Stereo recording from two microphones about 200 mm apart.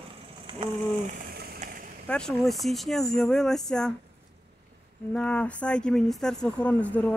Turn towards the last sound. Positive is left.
turn(degrees=5)  # may be behind; listen again after turning